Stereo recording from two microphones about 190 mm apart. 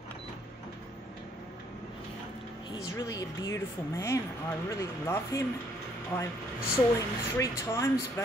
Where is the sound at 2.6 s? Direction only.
20° left (ahead or behind).